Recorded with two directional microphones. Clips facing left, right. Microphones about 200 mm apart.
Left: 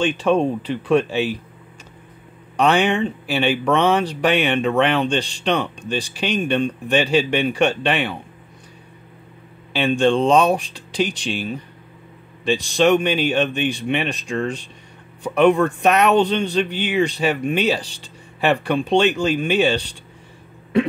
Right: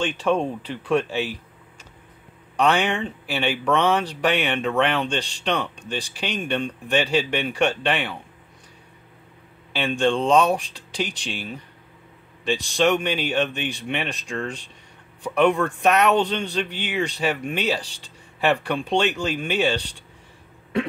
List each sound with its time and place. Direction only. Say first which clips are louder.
0.2 s speech: left 4 dB; 20° left (ahead or behind)
2.5 s speech: left 4 dB; 20° left (ahead or behind)
9.7 s speech: left 4 dB; 20° left (ahead or behind)